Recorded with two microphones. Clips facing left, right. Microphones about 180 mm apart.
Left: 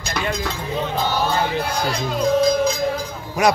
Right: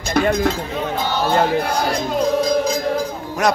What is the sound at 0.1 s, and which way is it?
Speech, 55° right (ahead or behind).